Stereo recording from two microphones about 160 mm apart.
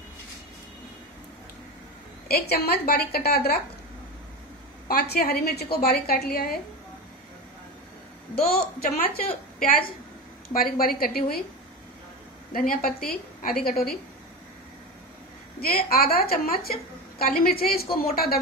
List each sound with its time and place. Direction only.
2.2 s a woman's voice: 75° left (ahead or behind)
4.8 s a woman's voice: 80° left
8.7 s a woman's voice: 70° left (ahead or behind)
12.5 s a woman's voice: 65° left (ahead or behind)
15.6 s a woman's voice: 70° left (ahead or behind)